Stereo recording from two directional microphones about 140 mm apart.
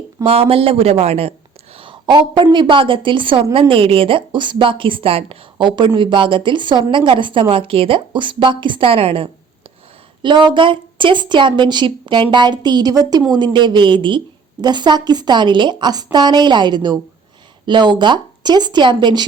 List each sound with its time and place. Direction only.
0.3 s a man's voice: 45° right (ahead or behind)